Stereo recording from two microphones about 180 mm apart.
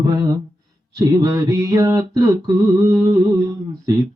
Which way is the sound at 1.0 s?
20° right (ahead or behind).